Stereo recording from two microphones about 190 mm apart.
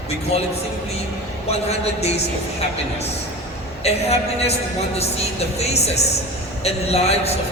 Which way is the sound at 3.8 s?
35° left (ahead or behind).